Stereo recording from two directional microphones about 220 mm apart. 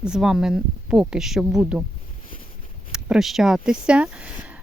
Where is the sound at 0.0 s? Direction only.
5° right (ahead or behind).